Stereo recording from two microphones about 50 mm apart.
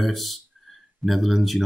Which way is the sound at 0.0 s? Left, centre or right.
Centre.